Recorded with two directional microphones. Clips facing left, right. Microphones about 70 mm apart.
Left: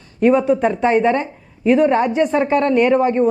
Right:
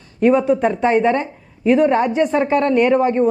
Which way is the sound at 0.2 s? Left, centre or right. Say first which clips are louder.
Even; left.